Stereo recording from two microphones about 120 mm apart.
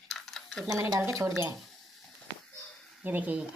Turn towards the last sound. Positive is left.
turn(degrees=-15)  # may be behind; listen again after turning